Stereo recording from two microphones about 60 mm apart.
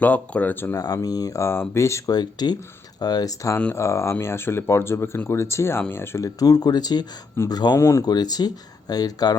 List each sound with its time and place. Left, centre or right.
0.0 s speech: left
0.5 s speech: left
1.0 s speech: left
1.4 s speech: left
3.0 s speech: left
3.8 s speech: left
6.1 s speech: left
7.8 s speech: left